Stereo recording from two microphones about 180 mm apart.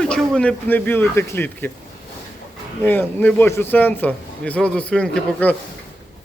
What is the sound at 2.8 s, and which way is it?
Speech, 10° left (ahead or behind).